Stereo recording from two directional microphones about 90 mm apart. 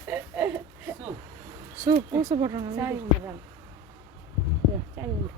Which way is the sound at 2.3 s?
45° right (ahead or behind).